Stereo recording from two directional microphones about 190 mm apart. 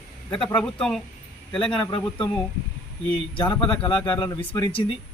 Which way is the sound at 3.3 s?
25° left (ahead or behind).